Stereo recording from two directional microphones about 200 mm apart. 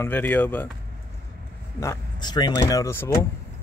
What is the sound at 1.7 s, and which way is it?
Speech, 15° left (ahead or behind).